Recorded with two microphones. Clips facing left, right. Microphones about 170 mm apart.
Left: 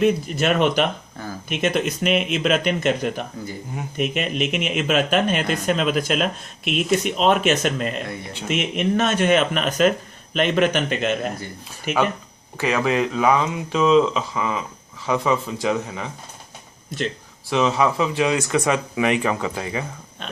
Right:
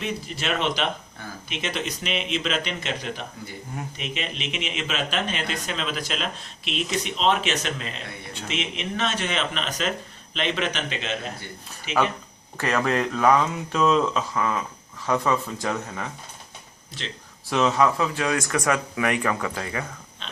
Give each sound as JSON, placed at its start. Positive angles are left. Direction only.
{"t": 0.0, "sound": "speech", "side_deg": 50}
{"t": 12.5, "sound": "speech", "side_deg": 5}
{"t": 17.5, "sound": "speech", "side_deg": 5}
{"t": 20.2, "sound": "a sound", "side_deg": 50}